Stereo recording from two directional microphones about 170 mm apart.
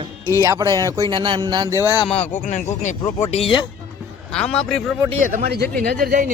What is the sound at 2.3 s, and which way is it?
Speech, 45° left (ahead or behind).